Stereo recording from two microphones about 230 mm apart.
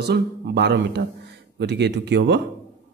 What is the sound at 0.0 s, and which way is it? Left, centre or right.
Speech, right.